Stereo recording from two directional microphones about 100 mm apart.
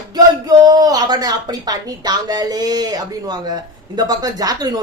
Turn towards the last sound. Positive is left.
turn(degrees=-40)  # may be behind; listen again after turning